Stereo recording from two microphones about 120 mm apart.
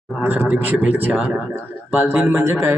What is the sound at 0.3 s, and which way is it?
A man's voice, 15° right (ahead or behind).